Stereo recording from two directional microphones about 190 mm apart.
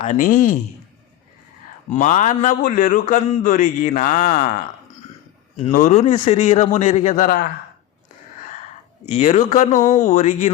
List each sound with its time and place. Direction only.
0.0 s a man's voice: 40° left (ahead or behind)
1.9 s a man's voice: 40° left (ahead or behind)
5.5 s a man's voice: 40° left (ahead or behind)
9.0 s a man's voice: 35° left (ahead or behind)